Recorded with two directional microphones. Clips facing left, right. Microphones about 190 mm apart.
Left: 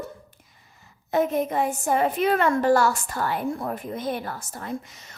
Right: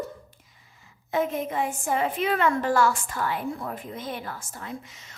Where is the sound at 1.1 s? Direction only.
40° left (ahead or behind).